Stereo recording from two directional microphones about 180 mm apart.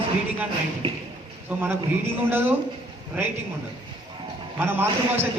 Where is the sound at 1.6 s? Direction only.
15° right (ahead or behind).